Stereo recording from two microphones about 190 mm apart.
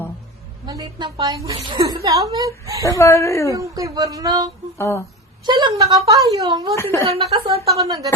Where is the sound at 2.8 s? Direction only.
15° left (ahead or behind).